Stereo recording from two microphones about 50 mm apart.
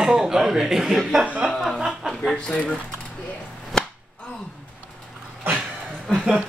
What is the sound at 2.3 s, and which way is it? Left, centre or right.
Speech, left.